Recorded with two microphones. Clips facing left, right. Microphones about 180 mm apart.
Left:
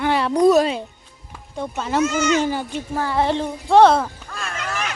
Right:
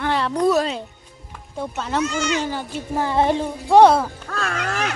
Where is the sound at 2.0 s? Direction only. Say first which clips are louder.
Left 5 dB; 45° left (ahead or behind).